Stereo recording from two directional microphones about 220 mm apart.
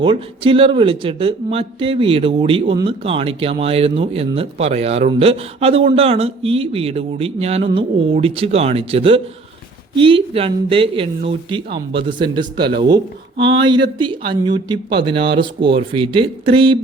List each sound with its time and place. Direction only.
0.0 s speech: 25° right (ahead or behind)